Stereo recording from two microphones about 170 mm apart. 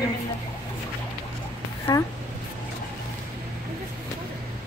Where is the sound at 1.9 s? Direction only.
25° left (ahead or behind).